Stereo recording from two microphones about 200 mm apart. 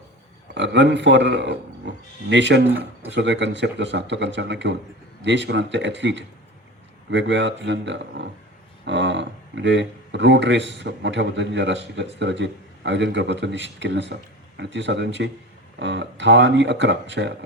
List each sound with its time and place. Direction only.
0.5 s speech: 60° right (ahead or behind)